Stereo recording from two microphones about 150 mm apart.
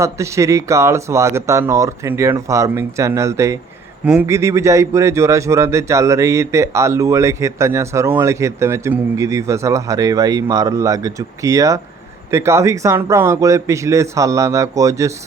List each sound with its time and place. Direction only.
0.0 s speech: 20° right (ahead or behind)
4.0 s speech: 10° right (ahead or behind)
4.3 s speech: 20° right (ahead or behind)